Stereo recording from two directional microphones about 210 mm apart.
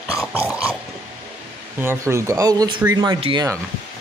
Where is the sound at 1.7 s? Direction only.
10° right (ahead or behind).